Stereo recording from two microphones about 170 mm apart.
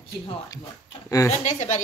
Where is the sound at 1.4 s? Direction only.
45° left (ahead or behind).